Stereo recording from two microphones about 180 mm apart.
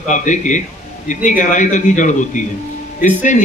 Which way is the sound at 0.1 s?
45° left (ahead or behind).